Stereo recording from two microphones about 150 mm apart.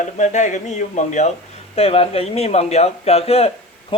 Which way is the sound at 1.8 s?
40° left (ahead or behind).